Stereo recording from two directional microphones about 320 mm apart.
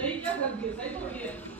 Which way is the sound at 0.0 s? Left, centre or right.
Centre.